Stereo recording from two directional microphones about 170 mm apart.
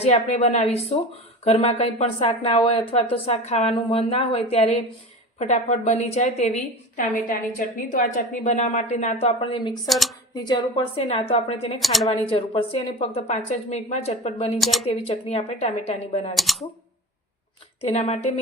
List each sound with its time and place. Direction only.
0.0 s a woman's voice: 40° left (ahead or behind)
9.8 s speech: centre (ahead or behind)
10.3 s a woman's voice: 25° left (ahead or behind)
11.8 s speech: centre (ahead or behind)
12.1 s a woman's voice: 35° left (ahead or behind)
14.6 s speech: centre (ahead or behind)
14.8 s a woman's voice: 35° left (ahead or behind)
16.3 s speech: centre (ahead or behind)
17.7 s a woman's voice: 35° left (ahead or behind)